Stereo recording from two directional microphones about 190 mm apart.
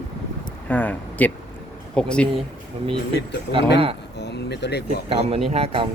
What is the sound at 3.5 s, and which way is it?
Speech, 60° left (ahead or behind).